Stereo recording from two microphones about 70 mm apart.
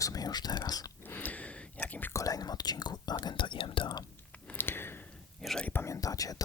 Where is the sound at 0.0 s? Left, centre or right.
Left.